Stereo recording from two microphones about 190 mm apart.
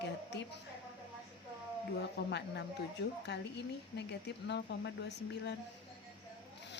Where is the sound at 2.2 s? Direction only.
60° left (ahead or behind).